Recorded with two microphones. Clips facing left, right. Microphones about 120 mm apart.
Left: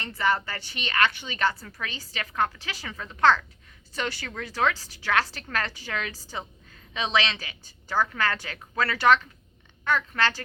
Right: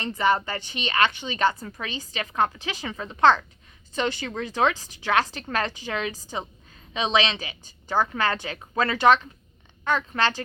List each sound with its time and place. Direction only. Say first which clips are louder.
0.0 s a woman's voice: right 3 dB; 20° right (ahead or behind)